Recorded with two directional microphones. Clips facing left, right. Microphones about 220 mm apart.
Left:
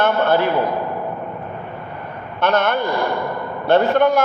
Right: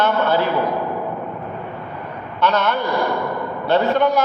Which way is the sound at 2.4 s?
50° left (ahead or behind).